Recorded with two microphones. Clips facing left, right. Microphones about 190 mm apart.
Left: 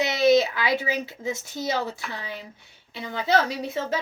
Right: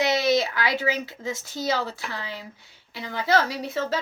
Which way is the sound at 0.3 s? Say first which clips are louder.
Left 4 dB; 20° left (ahead or behind).